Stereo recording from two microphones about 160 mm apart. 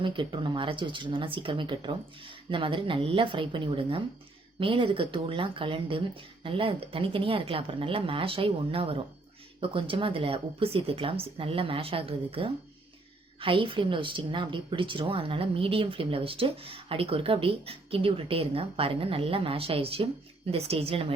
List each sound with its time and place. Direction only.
0.0 s a woman's voice: 30° right (ahead or behind)